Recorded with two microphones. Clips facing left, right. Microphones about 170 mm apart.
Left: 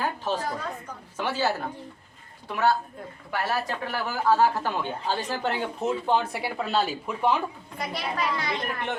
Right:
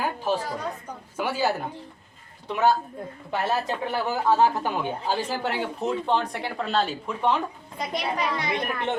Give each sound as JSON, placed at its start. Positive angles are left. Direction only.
{"t": 1.1, "sound": "a child's voice", "side_deg": -10}
{"t": 7.8, "sound": "a child's voice", "side_deg": -20}